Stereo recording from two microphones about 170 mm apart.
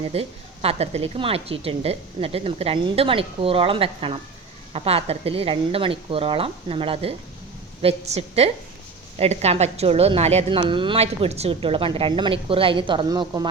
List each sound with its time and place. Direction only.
0.1 s a woman's voice: 35° right (ahead or behind)